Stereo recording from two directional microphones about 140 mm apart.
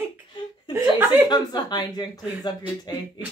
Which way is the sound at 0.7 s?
15° right (ahead or behind).